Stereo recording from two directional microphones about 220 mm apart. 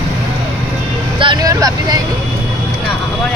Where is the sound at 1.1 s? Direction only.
20° right (ahead or behind).